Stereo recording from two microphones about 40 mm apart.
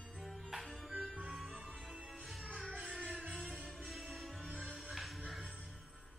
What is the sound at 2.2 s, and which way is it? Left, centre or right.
Music, centre.